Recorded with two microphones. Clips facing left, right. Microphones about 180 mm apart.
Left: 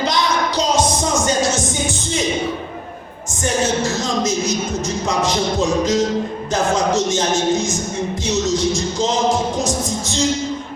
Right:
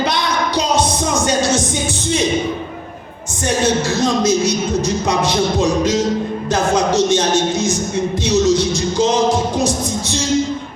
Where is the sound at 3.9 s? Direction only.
65° right (ahead or behind).